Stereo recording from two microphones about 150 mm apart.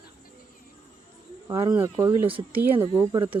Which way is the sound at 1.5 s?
20° right (ahead or behind).